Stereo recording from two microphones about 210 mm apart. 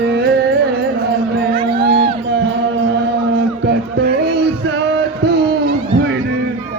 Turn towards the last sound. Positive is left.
turn(degrees=-50)  # may be behind; listen again after turning